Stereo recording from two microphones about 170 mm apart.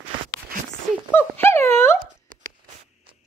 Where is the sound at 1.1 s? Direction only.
15° left (ahead or behind).